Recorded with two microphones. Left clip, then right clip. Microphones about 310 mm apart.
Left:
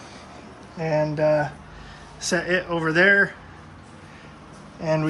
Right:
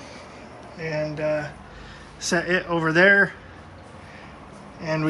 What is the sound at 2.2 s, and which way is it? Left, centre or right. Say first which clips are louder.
Speech: even; centre.